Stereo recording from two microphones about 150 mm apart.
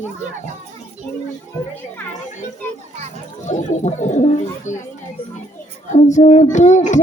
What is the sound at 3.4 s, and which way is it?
Child singing, 50° left (ahead or behind).